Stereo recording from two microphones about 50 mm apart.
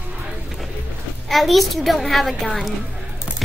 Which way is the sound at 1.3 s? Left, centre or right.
Centre.